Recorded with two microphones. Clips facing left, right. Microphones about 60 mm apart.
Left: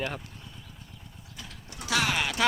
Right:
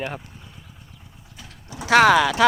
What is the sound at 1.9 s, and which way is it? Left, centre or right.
Speech, right.